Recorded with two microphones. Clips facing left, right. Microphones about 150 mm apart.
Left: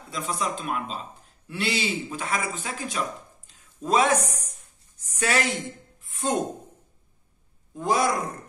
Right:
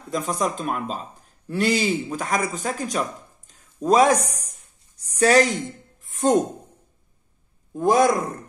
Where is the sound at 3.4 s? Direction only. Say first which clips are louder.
Right 6 dB; 40° right (ahead or behind).